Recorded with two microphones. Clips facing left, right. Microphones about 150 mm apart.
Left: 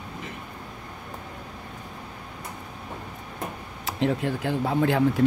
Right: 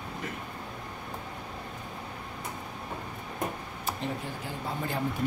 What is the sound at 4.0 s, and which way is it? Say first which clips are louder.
Speech: left 15 dB; 75° left (ahead or behind).